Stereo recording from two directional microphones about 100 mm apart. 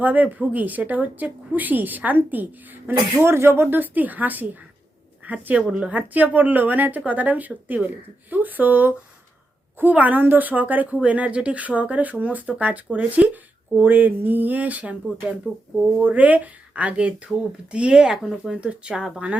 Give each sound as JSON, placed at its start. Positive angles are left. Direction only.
{"t": 0.0, "sound": "a woman's voice", "side_deg": -15}